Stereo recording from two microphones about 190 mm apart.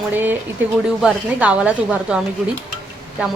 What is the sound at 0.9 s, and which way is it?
A woman's voice, 5° right (ahead or behind).